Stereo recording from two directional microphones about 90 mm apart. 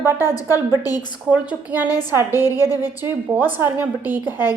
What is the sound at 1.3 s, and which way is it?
Speech, 15° right (ahead or behind).